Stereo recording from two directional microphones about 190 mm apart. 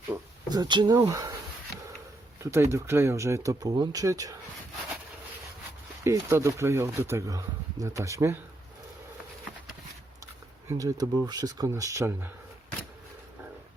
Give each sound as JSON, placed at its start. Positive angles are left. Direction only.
{"t": 0.1, "sound": "speech", "side_deg": -20}
{"t": 2.4, "sound": "speech", "side_deg": -15}
{"t": 6.1, "sound": "speech", "side_deg": -15}
{"t": 10.7, "sound": "speech", "side_deg": -15}